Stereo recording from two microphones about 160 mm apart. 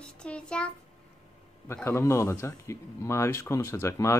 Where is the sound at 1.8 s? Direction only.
15° left (ahead or behind).